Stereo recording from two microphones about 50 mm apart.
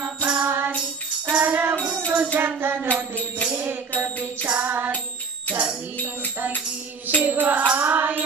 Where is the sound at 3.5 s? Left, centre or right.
Right.